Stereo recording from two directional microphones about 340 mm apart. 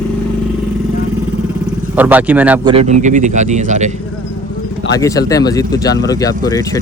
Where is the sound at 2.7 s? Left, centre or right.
Centre.